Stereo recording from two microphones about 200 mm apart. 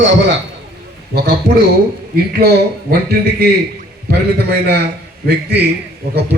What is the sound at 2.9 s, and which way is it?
A man's voice, 50° right (ahead or behind).